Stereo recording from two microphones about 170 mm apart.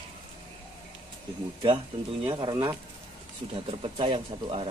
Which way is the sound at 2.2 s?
30° right (ahead or behind).